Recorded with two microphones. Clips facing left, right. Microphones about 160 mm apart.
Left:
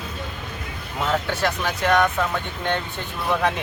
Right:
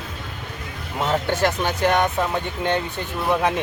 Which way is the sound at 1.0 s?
25° right (ahead or behind).